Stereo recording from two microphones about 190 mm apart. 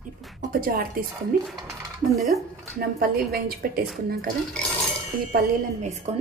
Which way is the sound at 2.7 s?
50° right (ahead or behind).